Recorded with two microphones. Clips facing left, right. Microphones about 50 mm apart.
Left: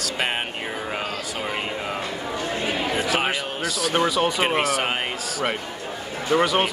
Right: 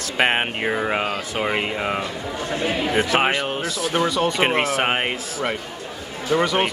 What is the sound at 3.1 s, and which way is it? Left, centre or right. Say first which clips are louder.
Speech: right 4 dB; right.